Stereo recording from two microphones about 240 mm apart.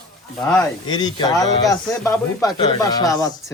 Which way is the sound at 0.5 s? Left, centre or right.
Centre.